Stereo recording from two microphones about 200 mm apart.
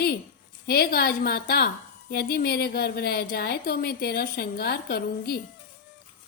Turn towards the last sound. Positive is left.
turn(degrees=50)  # may be behind; listen again after turning